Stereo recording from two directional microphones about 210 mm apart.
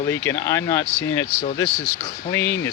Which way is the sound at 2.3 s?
10° left (ahead or behind).